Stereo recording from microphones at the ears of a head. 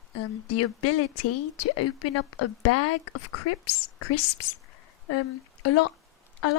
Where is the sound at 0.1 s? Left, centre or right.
Left.